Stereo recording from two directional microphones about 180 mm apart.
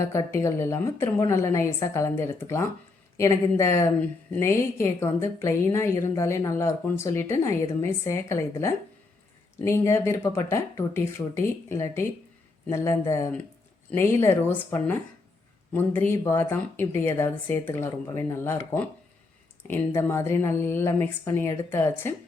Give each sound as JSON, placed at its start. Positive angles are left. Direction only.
{"t": 0.0, "sound": "a woman's voice", "side_deg": 15}